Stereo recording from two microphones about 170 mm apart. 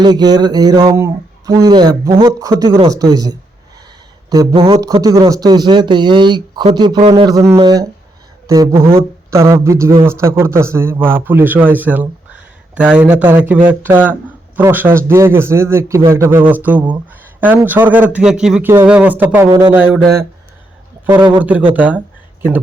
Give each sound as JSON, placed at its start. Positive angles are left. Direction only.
{"t": 0.0, "sound": "a man's voice", "side_deg": -25}
{"t": 21.2, "sound": "speech", "side_deg": -25}
{"t": 21.4, "sound": "a man's voice", "side_deg": -10}